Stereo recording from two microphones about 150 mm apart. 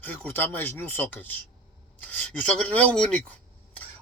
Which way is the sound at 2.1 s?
10° left (ahead or behind).